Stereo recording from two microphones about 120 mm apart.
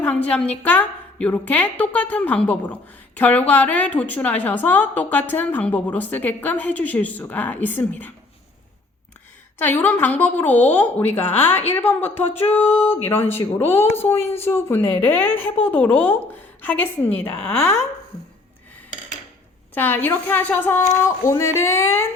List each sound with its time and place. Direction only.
0.0 s a woman's voice: 10° left (ahead or behind)
9.6 s a woman's voice: 15° left (ahead or behind)
19.7 s a woman's voice: 15° left (ahead or behind)